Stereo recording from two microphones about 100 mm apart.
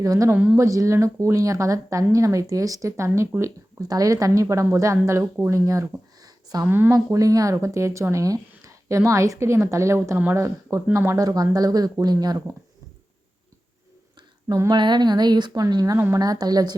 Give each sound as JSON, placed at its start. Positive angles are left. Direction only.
{"t": 0.0, "sound": "speech", "side_deg": -35}
{"t": 3.8, "sound": "speech", "side_deg": -40}
{"t": 6.2, "sound": "a sound", "side_deg": -40}
{"t": 6.7, "sound": "speech", "side_deg": -20}
{"t": 6.9, "sound": "speech", "side_deg": -35}
{"t": 14.4, "sound": "speech", "side_deg": -30}
{"t": 14.7, "sound": "a woman's voice", "side_deg": -45}
{"t": 16.0, "sound": "speech", "side_deg": -25}
{"t": 16.2, "sound": "speech", "side_deg": -40}